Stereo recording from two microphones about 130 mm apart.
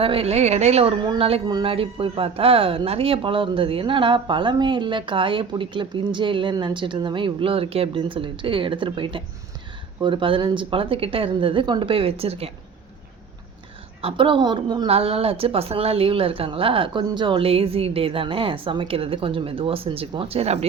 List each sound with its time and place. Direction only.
0.0 s a woman's voice: 45° right (ahead or behind)
1.5 s a woman's voice: 40° right (ahead or behind)
14.0 s speech: 40° right (ahead or behind)
14.8 s a woman's voice: 50° right (ahead or behind)